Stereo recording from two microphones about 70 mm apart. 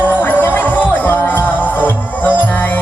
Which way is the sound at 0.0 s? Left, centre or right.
Left.